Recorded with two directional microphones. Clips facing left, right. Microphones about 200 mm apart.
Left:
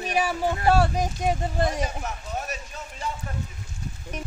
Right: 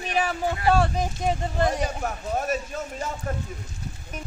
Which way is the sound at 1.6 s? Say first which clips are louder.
Right 2 dB; 40° right (ahead or behind).